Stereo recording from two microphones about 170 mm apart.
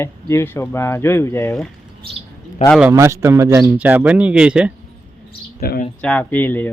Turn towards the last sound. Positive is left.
turn(degrees=10)  # may be behind; listen again after turning